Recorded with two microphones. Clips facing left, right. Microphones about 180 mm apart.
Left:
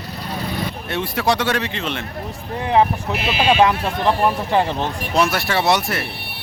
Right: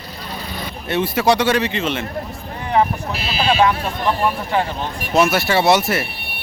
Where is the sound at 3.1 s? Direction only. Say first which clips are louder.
Left 3 dB; 35° right (ahead or behind).